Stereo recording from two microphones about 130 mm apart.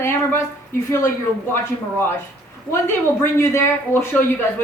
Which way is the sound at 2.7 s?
20° left (ahead or behind).